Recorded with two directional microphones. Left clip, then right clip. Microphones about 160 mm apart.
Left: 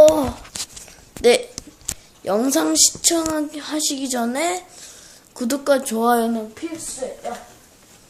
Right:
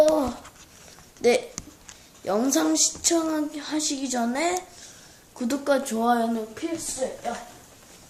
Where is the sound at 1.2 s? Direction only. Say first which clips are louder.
Left 6 dB; 40° left (ahead or behind).